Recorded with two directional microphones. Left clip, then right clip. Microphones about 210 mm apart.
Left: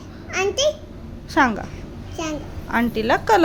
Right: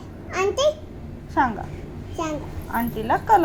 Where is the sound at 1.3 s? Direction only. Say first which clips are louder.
Left 3 dB; 40° left (ahead or behind).